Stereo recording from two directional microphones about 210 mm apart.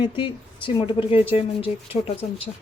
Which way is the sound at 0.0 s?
25° left (ahead or behind).